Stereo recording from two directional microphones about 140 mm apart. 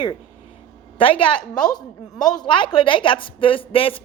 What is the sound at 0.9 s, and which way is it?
A woman's voice, 40° left (ahead or behind).